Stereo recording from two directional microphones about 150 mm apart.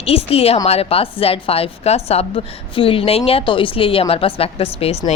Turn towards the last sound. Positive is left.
turn(degrees=40)  # may be behind; listen again after turning